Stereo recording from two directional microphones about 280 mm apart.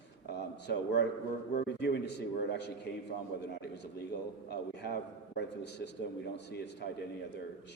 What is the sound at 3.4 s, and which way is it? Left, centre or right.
A man's voice, left.